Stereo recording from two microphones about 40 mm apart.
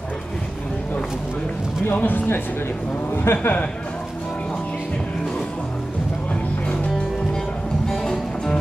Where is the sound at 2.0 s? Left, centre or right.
Left.